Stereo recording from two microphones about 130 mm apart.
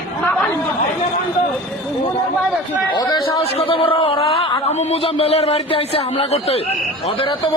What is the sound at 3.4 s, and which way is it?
A man's voice, 50° left (ahead or behind).